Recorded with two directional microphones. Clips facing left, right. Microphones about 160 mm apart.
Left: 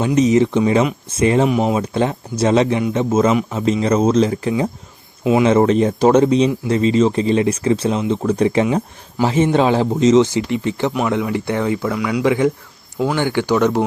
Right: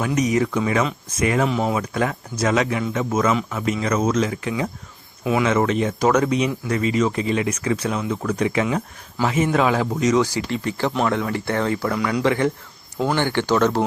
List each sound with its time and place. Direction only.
0.0 s speech: 25° left (ahead or behind)
1.5 s speech: 15° left (ahead or behind)